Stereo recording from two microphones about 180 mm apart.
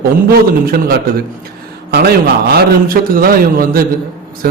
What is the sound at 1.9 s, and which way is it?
A man's voice, 60° right (ahead or behind).